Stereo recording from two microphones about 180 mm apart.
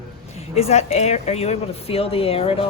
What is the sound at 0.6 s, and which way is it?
Speech, 35° left (ahead or behind).